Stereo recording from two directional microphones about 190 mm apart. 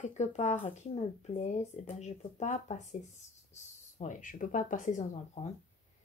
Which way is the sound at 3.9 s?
40° left (ahead or behind).